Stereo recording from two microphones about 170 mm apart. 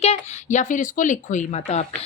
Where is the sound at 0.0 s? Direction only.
40° left (ahead or behind).